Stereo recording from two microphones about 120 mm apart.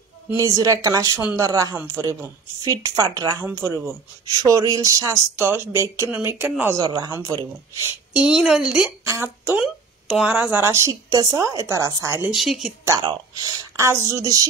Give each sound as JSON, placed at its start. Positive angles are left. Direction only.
{"t": 0.4, "sound": "speech", "side_deg": -30}
{"t": 6.8, "sound": "speech", "side_deg": -30}
{"t": 8.3, "sound": "a woman's voice", "side_deg": -5}
{"t": 9.0, "sound": "a woman's voice", "side_deg": -20}
{"t": 9.6, "sound": "speech", "side_deg": -5}
{"t": 10.6, "sound": "speech", "side_deg": -25}
{"t": 12.3, "sound": "a woman's voice", "side_deg": 0}
{"t": 13.0, "sound": "speech", "side_deg": -40}
{"t": 13.7, "sound": "speech", "side_deg": -25}